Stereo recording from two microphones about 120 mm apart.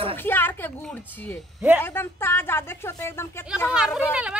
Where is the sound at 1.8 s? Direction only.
20° left (ahead or behind).